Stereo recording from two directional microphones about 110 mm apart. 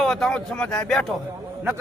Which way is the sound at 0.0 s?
5° left (ahead or behind).